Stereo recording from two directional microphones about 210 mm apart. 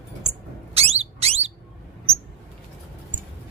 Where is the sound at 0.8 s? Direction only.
30° right (ahead or behind).